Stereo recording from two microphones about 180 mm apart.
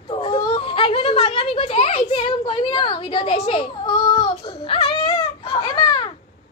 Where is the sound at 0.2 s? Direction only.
30° left (ahead or behind).